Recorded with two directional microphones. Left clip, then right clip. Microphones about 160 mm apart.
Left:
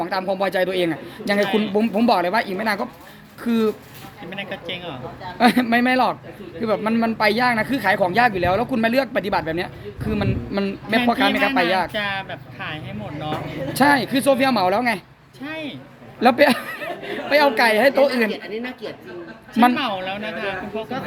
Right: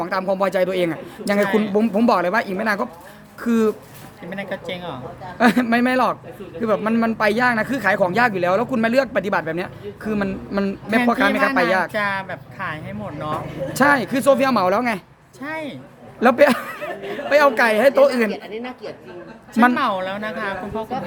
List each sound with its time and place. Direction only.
0.0 s speech: 5° right (ahead or behind)
4.3 s speech: 35° right (ahead or behind)
5.4 s speech: centre (ahead or behind)
11.9 s a woman's voice: 30° right (ahead or behind)
13.7 s speech: centre (ahead or behind)
15.4 s a woman's voice: 30° right (ahead or behind)
16.2 s speech: centre (ahead or behind)
18.4 s a woman's voice: 75° left (ahead or behind)
19.7 s a woman's voice: 30° right (ahead or behind)